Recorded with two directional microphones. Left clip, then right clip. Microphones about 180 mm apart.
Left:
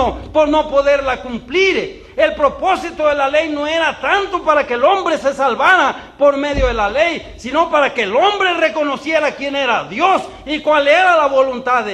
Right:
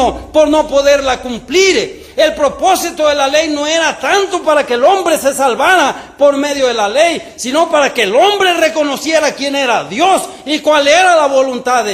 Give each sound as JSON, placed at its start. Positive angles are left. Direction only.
{"t": 0.0, "sound": "a man's voice", "side_deg": -50}